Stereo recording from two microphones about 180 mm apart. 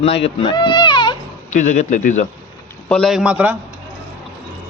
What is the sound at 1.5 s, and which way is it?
Speech, 40° left (ahead or behind).